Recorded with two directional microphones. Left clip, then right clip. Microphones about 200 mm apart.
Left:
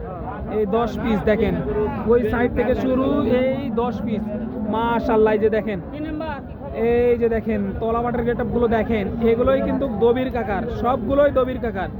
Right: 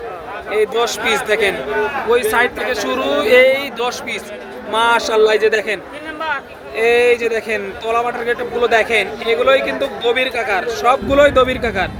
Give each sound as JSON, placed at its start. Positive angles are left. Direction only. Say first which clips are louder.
{"t": 0.5, "sound": "a man's voice", "louder": "right 5 dB", "side_deg": -15}
{"t": 2.3, "sound": "a man's voice", "louder": "right 4 dB", "side_deg": -25}
{"t": 6.7, "sound": "a man's voice", "louder": "right 5 dB", "side_deg": -15}